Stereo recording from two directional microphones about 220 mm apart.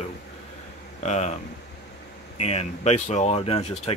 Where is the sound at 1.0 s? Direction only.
30° left (ahead or behind).